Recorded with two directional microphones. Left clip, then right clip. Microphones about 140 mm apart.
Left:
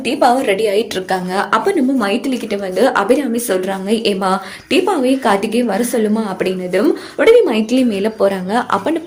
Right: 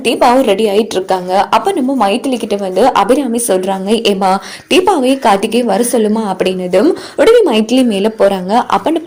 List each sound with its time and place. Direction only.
0.0 s a woman's voice: 60° right (ahead or behind)
0.5 s a woman's voice: 35° right (ahead or behind)